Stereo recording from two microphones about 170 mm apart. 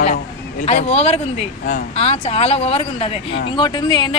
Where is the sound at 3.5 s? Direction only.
25° left (ahead or behind).